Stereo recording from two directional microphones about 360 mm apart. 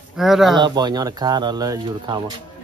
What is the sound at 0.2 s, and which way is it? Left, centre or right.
Speech, centre.